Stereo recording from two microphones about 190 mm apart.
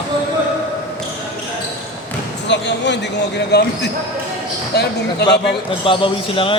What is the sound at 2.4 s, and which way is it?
Speech, 65° left (ahead or behind).